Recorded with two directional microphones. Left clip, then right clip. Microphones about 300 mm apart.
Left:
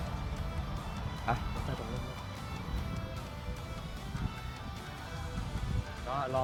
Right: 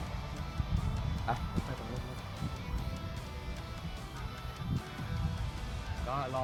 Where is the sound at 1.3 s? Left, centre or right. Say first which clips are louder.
Left 2 dB; centre.